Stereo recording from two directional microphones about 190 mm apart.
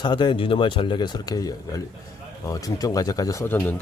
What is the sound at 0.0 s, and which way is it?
Speech, 25° left (ahead or behind).